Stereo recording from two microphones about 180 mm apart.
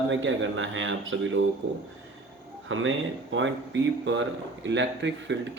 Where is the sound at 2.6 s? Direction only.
90° right.